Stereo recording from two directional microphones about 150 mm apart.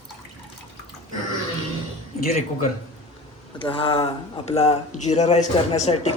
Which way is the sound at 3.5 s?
35° left (ahead or behind).